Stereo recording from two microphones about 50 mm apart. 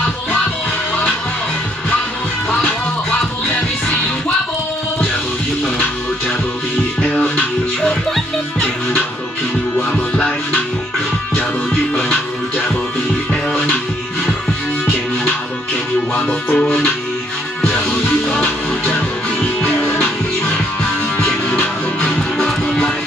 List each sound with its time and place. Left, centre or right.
2.5 s music: centre
7.0 s music: left
10.1 s music: left
13.3 s music: centre
16.5 s music: centre
18.4 s music: left
19.8 s music: left
22.4 s music: centre